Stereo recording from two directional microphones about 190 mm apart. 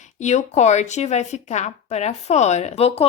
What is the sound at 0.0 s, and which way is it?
Speech, 40° left (ahead or behind).